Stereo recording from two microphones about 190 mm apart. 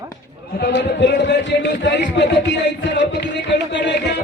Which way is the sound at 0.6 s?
65° left (ahead or behind).